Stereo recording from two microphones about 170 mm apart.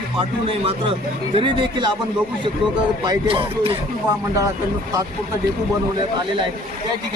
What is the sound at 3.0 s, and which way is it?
Speech, 25° right (ahead or behind).